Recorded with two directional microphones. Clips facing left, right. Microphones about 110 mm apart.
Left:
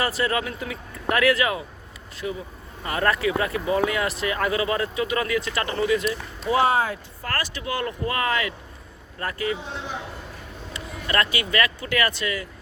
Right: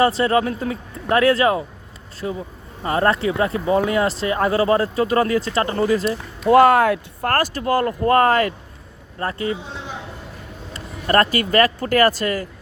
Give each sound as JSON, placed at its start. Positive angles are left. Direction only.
{"t": 0.0, "sound": "speech", "side_deg": -30}
{"t": 6.4, "sound": "speech", "side_deg": -55}
{"t": 7.3, "sound": "speech", "side_deg": -45}
{"t": 9.1, "sound": "speech", "side_deg": -30}
{"t": 10.8, "sound": "speech", "side_deg": -40}